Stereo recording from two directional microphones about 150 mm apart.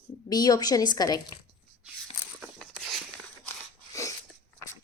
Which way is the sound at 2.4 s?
Centre (ahead or behind).